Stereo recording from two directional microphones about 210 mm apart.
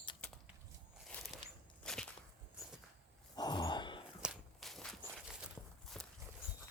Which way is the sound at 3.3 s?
20° left (ahead or behind).